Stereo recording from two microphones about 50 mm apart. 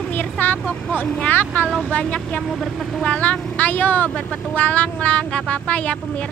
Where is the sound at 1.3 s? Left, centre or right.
Left.